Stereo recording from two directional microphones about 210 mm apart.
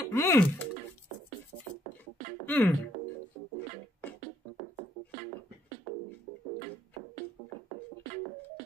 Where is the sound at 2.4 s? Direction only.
10° left (ahead or behind).